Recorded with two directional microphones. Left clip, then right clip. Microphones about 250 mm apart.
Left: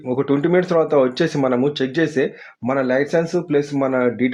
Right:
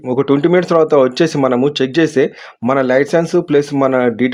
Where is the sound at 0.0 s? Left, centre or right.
Right.